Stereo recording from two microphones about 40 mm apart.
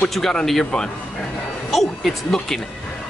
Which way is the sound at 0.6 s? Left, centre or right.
Left.